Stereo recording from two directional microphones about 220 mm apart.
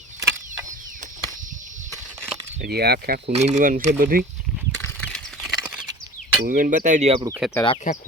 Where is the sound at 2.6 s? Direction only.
45° right (ahead or behind).